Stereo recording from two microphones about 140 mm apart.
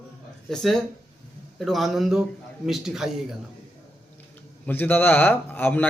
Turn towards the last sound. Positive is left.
turn(degrees=15)  # may be behind; listen again after turning